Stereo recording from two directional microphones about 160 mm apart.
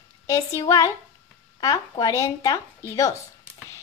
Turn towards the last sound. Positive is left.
turn(degrees=20)  # may be behind; listen again after turning